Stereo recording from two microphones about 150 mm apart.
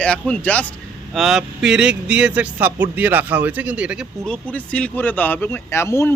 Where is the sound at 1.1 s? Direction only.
Centre (ahead or behind).